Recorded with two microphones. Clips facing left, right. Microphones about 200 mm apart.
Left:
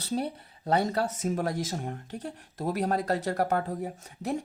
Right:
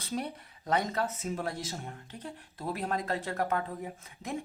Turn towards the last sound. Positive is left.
turn(degrees=40)  # may be behind; listen again after turning